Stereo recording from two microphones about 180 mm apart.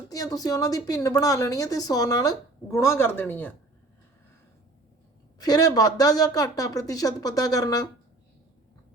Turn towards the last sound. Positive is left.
turn(degrees=20)  # may be behind; listen again after turning